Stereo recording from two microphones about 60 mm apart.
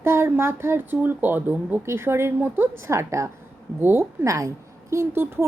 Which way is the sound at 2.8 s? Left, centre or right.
Right.